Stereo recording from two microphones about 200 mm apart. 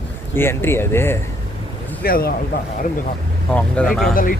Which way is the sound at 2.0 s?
50° left (ahead or behind).